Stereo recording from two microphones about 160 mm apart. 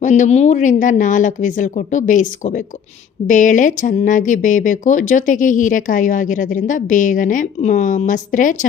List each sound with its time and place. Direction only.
0.0 s speech: 50° left (ahead or behind)
3.2 s speech: 55° left (ahead or behind)